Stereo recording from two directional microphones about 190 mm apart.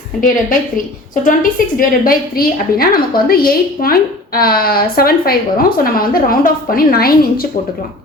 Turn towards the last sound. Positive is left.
turn(degrees=50)  # may be behind; listen again after turning